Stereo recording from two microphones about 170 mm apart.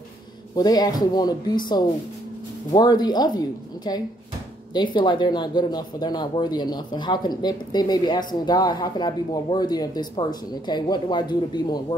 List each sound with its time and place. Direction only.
0.6 s speech: 25° left (ahead or behind)
2.7 s speech: 25° left (ahead or behind)